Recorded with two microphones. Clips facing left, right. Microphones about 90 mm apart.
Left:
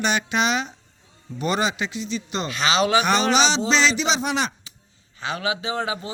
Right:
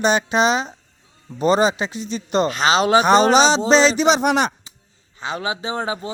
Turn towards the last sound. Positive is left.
turn(degrees=-30)  # may be behind; listen again after turning